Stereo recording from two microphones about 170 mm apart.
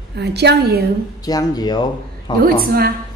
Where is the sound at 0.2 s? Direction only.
80° right.